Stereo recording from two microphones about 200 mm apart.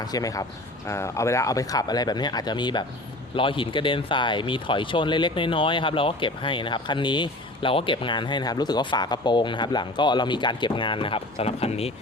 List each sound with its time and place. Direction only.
0.0 s speech: 20° left (ahead or behind)